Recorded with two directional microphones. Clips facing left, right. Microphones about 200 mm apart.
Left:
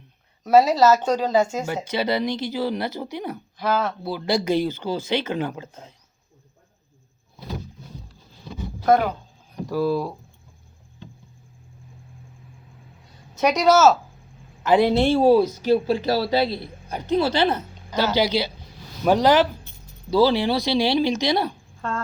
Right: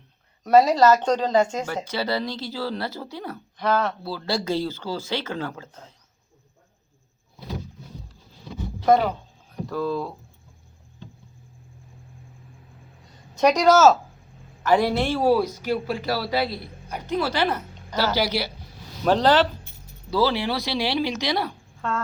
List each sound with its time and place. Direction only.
0.4 s speech: 5° left (ahead or behind)
1.6 s speech: 20° left (ahead or behind)
3.6 s speech: 5° left (ahead or behind)
4.0 s speech: 20° left (ahead or behind)
8.9 s speech: centre (ahead or behind)
13.3 s speech: 5° left (ahead or behind)
14.6 s speech: 20° left (ahead or behind)